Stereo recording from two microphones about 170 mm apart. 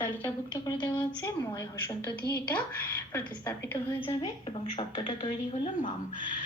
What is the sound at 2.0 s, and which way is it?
Speech, 70° left (ahead or behind).